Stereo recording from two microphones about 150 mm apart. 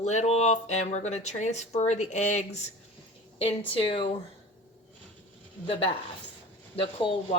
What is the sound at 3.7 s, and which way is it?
Speech, 35° left (ahead or behind).